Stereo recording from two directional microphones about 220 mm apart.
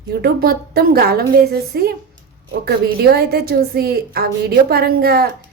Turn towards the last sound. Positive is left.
turn(degrees=-45)  # may be behind; listen again after turning